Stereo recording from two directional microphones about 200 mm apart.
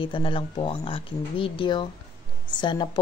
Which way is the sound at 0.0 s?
25° left (ahead or behind).